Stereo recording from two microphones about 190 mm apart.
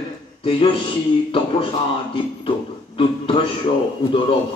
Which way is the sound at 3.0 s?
30° left (ahead or behind).